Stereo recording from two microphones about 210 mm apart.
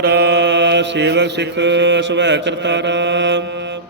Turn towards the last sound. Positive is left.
turn(degrees=-60)  # may be behind; listen again after turning